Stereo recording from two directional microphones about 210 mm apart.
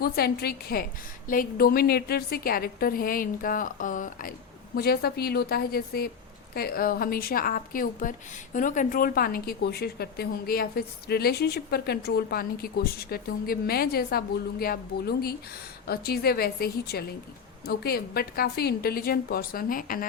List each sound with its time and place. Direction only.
0.0 s a woman's voice: 50° left (ahead or behind)